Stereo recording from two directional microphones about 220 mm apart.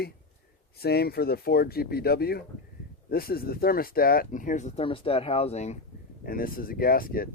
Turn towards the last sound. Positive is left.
turn(degrees=40)  # may be behind; listen again after turning